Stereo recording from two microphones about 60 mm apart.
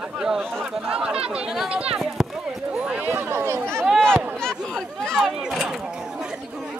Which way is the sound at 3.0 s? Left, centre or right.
Right.